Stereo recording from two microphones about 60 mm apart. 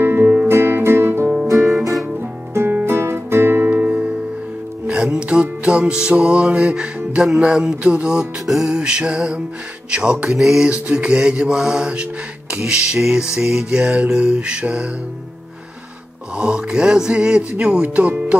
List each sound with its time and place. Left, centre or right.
0.0 s music: right
1.7 s music: centre
2.8 s music: right
3.7 s music: centre
10.7 s music: centre
16.3 s music: centre
17.8 s speech: right